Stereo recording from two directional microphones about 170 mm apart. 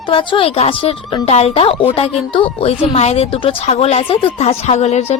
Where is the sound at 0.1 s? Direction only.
30° left (ahead or behind).